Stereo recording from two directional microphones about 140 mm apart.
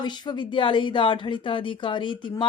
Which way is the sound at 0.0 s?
30° left (ahead or behind).